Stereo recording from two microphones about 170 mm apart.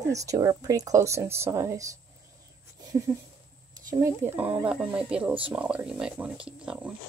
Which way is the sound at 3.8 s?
20° right (ahead or behind).